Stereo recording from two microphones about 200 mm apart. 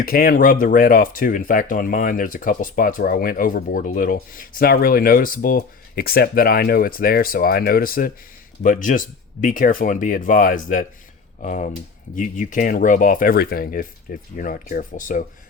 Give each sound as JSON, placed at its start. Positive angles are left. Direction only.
{"t": 0.0, "sound": "speech", "side_deg": 45}